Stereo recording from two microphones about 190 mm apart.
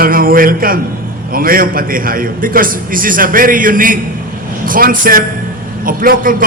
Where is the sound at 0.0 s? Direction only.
50° right (ahead or behind).